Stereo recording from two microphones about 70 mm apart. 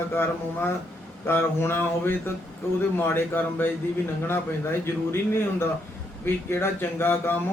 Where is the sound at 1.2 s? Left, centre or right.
Left.